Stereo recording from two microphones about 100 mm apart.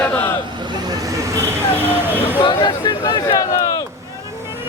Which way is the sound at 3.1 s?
35° left (ahead or behind).